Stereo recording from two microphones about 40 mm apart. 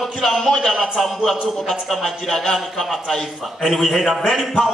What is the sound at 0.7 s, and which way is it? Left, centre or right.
Speech, centre.